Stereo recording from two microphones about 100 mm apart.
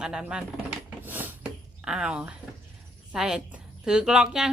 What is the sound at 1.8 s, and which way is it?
A woman's voice, 5° right (ahead or behind).